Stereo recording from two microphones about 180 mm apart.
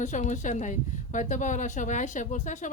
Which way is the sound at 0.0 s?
40° left (ahead or behind).